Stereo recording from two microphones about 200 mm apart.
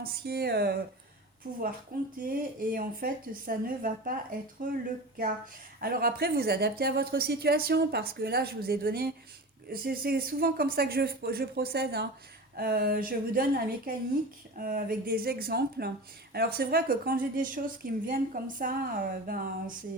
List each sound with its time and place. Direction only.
0.0 s a woman's voice: 50° right (ahead or behind)